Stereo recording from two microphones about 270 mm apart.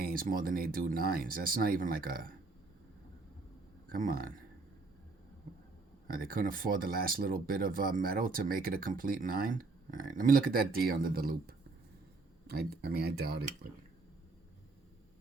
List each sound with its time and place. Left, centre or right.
0.0 s speech: right
3.8 s speech: right
6.1 s speech: right